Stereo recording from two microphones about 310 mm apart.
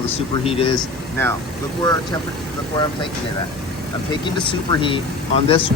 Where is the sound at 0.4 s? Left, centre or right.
Centre.